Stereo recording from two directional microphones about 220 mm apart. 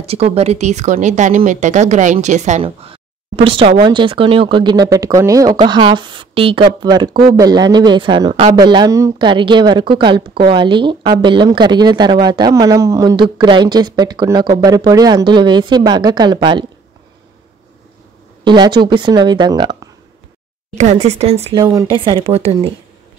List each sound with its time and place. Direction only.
0.0 s a woman's voice: 25° right (ahead or behind)
18.4 s a woman's voice: 20° right (ahead or behind)
20.7 s a woman's voice: 30° right (ahead or behind)